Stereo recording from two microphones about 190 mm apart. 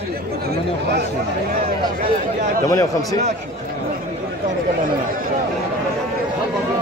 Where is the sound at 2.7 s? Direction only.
15° left (ahead or behind).